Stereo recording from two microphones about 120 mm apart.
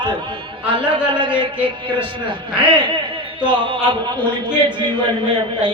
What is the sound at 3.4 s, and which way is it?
A man's voice, 45° right (ahead or behind).